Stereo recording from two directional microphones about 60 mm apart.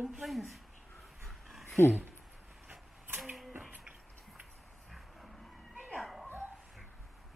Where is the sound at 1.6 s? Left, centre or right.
Left.